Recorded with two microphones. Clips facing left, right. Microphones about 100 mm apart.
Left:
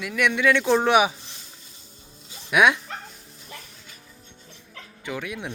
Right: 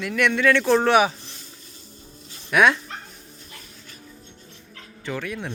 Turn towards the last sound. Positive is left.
turn(degrees=10)  # may be behind; listen again after turning